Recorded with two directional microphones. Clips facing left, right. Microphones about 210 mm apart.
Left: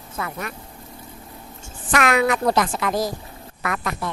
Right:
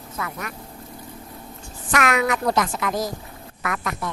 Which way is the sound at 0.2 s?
30° left (ahead or behind).